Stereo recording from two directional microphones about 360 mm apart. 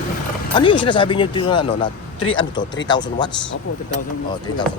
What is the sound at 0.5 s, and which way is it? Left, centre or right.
Speech, centre.